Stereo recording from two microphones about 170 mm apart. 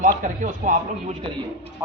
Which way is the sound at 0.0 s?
50° right (ahead or behind).